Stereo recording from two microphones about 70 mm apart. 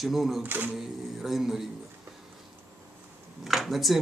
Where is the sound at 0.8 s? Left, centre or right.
Centre.